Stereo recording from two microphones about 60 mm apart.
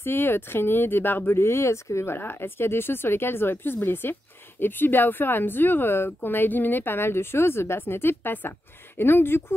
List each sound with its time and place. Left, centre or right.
0.0 s speech: left
2.1 s speech: left